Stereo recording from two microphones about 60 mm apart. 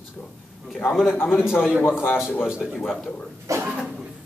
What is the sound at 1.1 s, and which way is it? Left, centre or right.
Speech, left.